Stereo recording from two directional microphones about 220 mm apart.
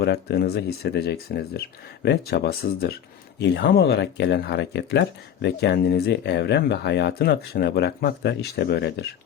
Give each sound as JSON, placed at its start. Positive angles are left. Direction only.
{"t": 0.0, "sound": "speech", "side_deg": 50}